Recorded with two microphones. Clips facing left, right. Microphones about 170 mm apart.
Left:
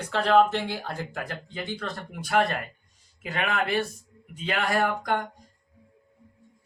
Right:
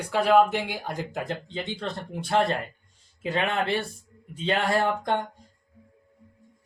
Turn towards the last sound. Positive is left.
turn(degrees=-25)  # may be behind; listen again after turning